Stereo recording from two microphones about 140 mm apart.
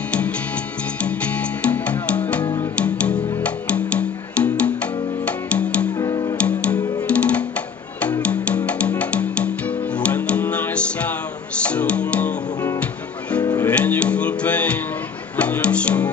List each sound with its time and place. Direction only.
1.7 s music: 10° left (ahead or behind)
5.9 s music: 25° left (ahead or behind)
6.3 s music: 10° left (ahead or behind)
13.4 s music: 30° left (ahead or behind)
13.7 s music: 10° left (ahead or behind)